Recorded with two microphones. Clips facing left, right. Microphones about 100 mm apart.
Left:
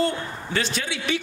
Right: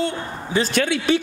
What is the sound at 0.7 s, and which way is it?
Speech, 60° right (ahead or behind).